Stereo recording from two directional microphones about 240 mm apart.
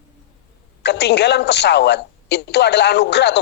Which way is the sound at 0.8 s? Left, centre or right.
Left.